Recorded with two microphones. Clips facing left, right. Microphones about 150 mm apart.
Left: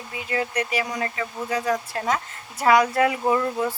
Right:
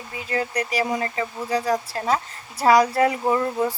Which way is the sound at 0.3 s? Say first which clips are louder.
Right 1 dB; 35° right (ahead or behind).